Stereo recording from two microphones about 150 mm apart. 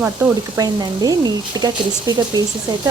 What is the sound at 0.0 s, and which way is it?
Speech, 20° right (ahead or behind).